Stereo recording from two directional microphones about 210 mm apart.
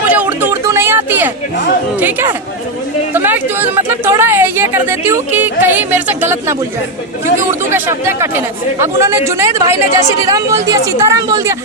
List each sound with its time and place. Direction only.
0.1 s a sound: 10° right (ahead or behind)
2.0 s speech: 10° right (ahead or behind)
7.7 s speech: 10° right (ahead or behind)